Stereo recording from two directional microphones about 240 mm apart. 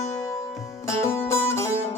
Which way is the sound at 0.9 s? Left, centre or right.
Centre.